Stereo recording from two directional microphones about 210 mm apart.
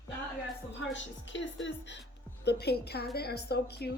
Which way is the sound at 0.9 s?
60° left (ahead or behind).